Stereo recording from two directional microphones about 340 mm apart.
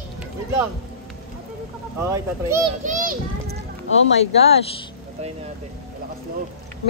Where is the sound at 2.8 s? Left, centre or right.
Right.